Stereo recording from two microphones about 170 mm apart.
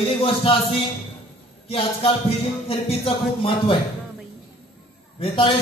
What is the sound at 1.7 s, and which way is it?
Music, 35° left (ahead or behind).